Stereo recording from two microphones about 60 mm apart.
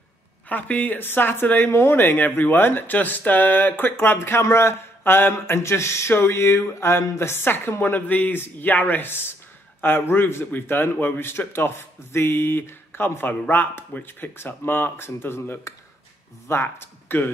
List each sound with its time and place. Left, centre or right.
0.5 s speech: left